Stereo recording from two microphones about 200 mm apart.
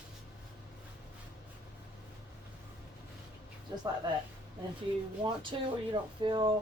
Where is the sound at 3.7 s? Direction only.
15° right (ahead or behind).